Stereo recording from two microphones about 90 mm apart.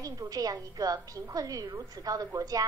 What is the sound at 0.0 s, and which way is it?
A woman's voice, 40° right (ahead or behind).